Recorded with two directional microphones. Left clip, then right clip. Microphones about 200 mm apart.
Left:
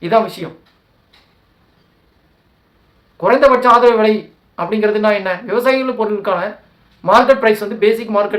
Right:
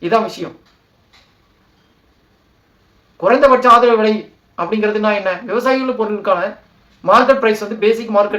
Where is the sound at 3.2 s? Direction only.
15° left (ahead or behind).